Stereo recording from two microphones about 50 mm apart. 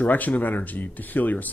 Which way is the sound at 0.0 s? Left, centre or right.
Left.